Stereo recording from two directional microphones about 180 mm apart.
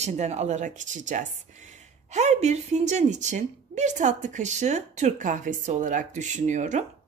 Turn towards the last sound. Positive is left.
turn(degrees=-40)  # may be behind; listen again after turning